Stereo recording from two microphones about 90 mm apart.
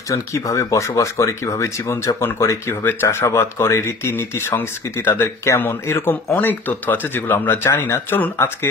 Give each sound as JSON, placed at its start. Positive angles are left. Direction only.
{"t": 0.1, "sound": "speech", "side_deg": 35}